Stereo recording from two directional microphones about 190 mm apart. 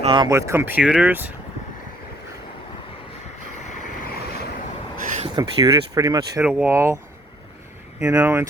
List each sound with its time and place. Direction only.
0.0 s speech: 25° right (ahead or behind); by 1.3 s 10° right (ahead or behind)
5.2 s speech: 25° right (ahead or behind)
6.4 s speech: 5° right (ahead or behind)
7.9 s speech: 5° right (ahead or behind)